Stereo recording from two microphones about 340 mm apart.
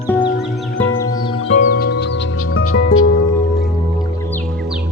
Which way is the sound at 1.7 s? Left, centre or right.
Left.